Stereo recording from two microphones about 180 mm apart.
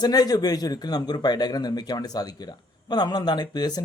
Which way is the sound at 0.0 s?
20° left (ahead or behind).